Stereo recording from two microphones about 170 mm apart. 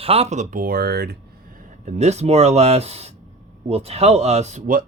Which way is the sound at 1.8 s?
40° right (ahead or behind).